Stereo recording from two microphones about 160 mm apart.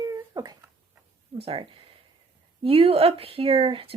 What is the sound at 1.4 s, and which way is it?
Speech, 35° right (ahead or behind).